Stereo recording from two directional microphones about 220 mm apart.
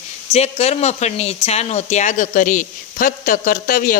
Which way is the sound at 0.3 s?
30° left (ahead or behind).